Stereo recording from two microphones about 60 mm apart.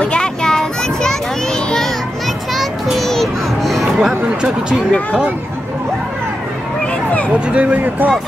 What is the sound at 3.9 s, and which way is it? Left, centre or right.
Speech, centre.